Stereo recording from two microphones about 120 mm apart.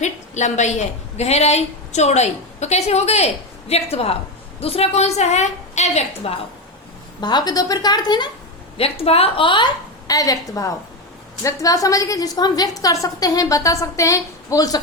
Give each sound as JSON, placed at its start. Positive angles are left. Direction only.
{"t": 0.0, "sound": "a woman's voice", "side_deg": 75}
{"t": 7.2, "sound": "a woman's voice", "side_deg": 35}
{"t": 8.8, "sound": "a woman's voice", "side_deg": 55}
{"t": 10.1, "sound": "a woman's voice", "side_deg": 30}